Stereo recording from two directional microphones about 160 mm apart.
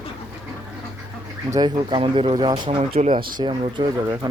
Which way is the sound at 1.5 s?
25° right (ahead or behind).